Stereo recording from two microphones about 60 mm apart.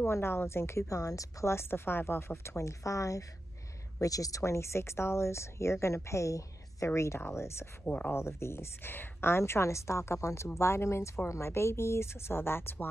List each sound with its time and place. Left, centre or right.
0.0 s a woman's voice: left
0.8 s speech: left
1.5 s a woman's voice: left
7.8 s speech: left
8.1 s a woman's voice: left